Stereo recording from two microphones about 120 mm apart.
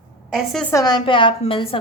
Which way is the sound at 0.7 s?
35° left (ahead or behind).